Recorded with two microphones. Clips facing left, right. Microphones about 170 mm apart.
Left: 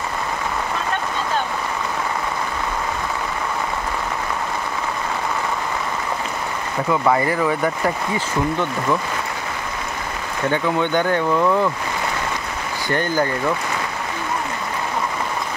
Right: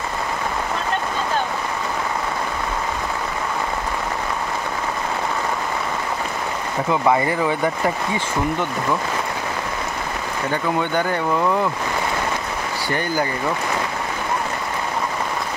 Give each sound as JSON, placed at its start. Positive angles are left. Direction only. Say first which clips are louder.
{"t": 6.9, "sound": "speech", "louder": "even", "side_deg": -20}